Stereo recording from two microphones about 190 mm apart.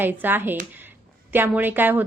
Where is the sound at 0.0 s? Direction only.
10° right (ahead or behind).